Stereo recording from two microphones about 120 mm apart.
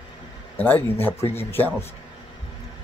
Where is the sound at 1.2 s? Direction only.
60° left (ahead or behind).